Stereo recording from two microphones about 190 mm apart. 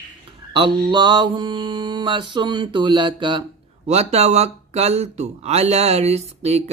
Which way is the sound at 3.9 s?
35° right (ahead or behind).